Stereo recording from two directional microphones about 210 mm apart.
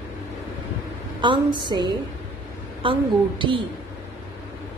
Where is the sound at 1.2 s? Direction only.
20° right (ahead or behind).